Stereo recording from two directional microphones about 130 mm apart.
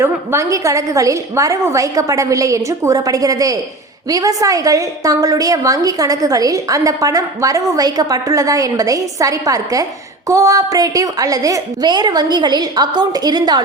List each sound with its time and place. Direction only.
0.0 s a woman's voice: 20° right (ahead or behind)